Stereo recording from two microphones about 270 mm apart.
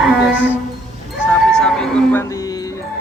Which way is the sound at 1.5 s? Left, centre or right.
Centre.